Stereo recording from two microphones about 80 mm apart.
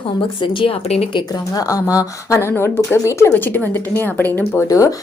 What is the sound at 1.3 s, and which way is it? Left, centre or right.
Speech, left.